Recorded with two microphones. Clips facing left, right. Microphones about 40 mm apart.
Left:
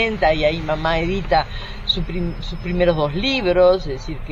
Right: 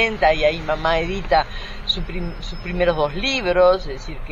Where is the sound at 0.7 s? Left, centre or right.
Left.